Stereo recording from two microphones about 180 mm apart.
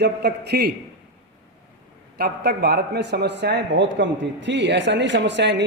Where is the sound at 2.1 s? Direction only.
60° right (ahead or behind).